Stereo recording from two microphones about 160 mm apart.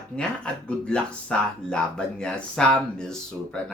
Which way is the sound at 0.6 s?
5° left (ahead or behind).